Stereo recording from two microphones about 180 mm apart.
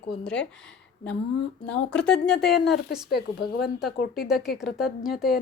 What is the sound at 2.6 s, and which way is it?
Speech, 65° left (ahead or behind).